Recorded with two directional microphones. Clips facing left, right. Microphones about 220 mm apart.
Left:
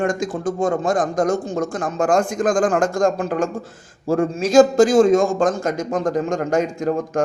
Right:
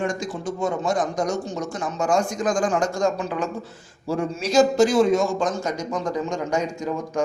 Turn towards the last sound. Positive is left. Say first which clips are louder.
# left 5 dB
turn(degrees=50)  # may be behind; listen again after turning